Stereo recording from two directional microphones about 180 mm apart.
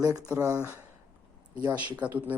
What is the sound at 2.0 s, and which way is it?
Speech, 10° right (ahead or behind).